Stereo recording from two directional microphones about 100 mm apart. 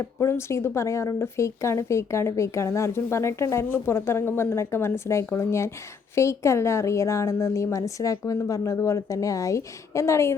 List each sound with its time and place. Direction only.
0.2 s speech: 25° left (ahead or behind)